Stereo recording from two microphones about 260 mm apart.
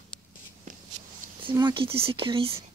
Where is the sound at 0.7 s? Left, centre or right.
Right.